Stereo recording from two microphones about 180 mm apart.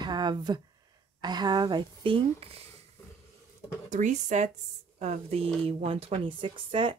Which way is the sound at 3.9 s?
45° right (ahead or behind).